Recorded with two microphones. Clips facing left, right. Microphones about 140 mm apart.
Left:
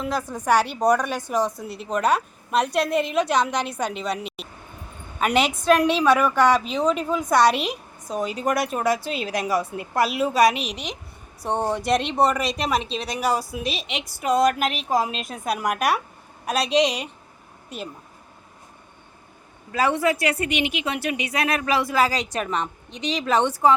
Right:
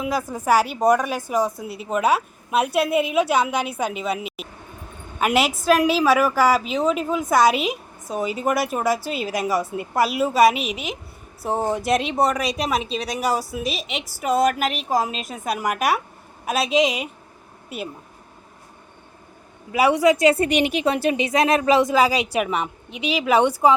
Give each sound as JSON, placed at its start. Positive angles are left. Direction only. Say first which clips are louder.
{"t": 0.0, "sound": "a woman's voice", "louder": "right 2 dB", "side_deg": -5}
{"t": 19.7, "sound": "a woman's voice", "louder": "right 5 dB", "side_deg": -15}